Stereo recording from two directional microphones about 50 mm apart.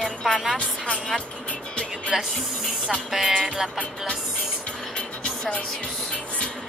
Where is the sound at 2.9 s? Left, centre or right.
Centre.